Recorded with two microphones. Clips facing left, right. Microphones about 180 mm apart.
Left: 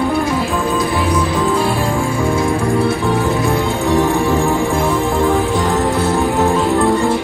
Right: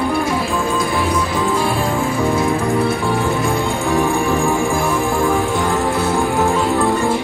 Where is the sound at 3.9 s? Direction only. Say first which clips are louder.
Left 2 dB; 20° left (ahead or behind).